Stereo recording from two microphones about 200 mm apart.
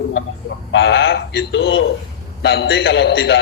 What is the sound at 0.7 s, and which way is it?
A man's voice, 60° left (ahead or behind).